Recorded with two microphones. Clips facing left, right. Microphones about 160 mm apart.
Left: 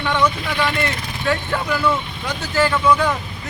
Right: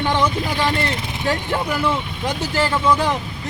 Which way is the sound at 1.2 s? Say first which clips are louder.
Left 1 dB; 20° right (ahead or behind).